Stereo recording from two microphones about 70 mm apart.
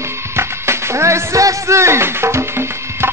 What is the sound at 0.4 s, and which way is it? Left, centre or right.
Music, right.